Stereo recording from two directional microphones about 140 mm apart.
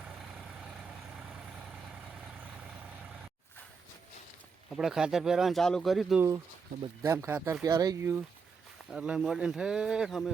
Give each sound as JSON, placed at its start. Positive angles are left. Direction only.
{"t": 0.0, "sound": "vehicle", "side_deg": 0}
{"t": 4.7, "sound": "speech", "side_deg": -5}
{"t": 6.1, "sound": "speech", "side_deg": -20}
{"t": 8.9, "sound": "speech", "side_deg": -5}